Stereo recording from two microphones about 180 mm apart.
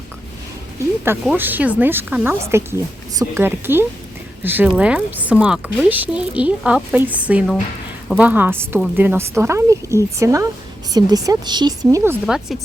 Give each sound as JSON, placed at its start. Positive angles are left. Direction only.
{"t": 1.0, "sound": "speech", "side_deg": -10}
{"t": 12.2, "sound": "speech", "side_deg": 0}